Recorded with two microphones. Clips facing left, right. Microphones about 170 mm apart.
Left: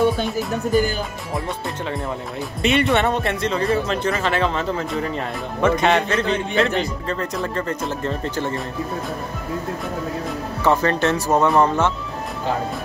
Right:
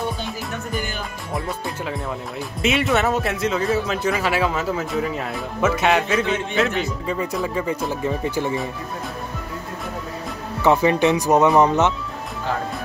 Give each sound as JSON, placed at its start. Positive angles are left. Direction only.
{"t": 2.6, "sound": "a man's voice", "side_deg": 0}
{"t": 10.6, "sound": "speech", "side_deg": -15}
{"t": 11.4, "sound": "a man's voice", "side_deg": -5}